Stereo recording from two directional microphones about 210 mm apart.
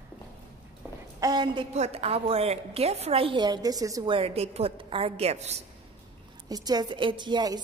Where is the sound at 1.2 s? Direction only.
20° right (ahead or behind).